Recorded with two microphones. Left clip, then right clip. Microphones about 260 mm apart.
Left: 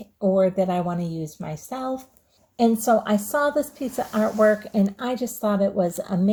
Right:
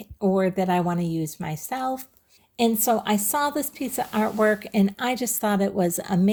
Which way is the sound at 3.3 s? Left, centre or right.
Right.